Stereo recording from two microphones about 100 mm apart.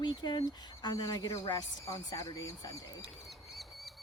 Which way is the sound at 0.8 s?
35° left (ahead or behind).